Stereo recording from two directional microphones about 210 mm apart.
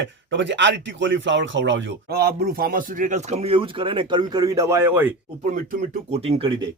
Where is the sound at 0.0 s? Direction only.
60° right (ahead or behind); by 5.1 s 10° right (ahead or behind).